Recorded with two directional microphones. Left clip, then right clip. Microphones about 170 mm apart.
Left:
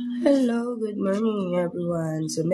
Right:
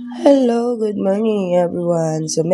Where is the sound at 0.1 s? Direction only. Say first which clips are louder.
Right 9 dB; 45° right (ahead or behind).